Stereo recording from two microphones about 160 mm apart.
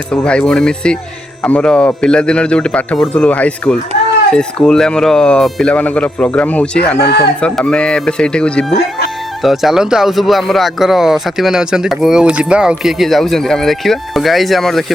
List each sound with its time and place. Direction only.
0.1 s speech: 5° left (ahead or behind)
7.0 s speech: 90° left
7.4 s speech: 5° left (ahead or behind)